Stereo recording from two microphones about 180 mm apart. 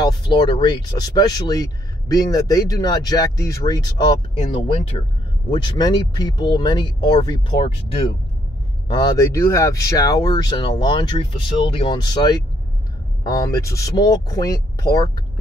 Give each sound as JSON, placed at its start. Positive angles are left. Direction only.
{"t": 0.0, "sound": "speech", "side_deg": 25}
{"t": 8.8, "sound": "speech", "side_deg": 25}